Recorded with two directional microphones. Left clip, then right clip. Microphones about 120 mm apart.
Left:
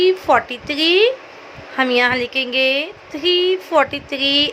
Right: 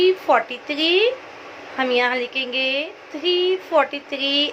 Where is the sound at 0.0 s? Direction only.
45° left (ahead or behind).